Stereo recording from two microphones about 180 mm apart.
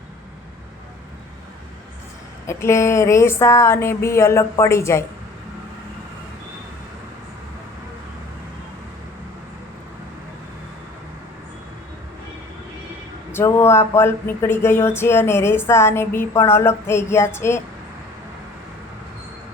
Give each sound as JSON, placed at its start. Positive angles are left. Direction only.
{"t": 2.5, "sound": "speech", "side_deg": 15}
{"t": 13.3, "sound": "speech", "side_deg": 15}